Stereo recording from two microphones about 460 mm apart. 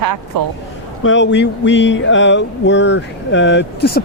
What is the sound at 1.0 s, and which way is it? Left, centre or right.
A man's voice, left.